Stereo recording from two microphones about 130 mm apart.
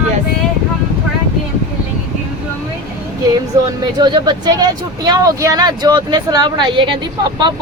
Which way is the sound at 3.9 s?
35° right (ahead or behind).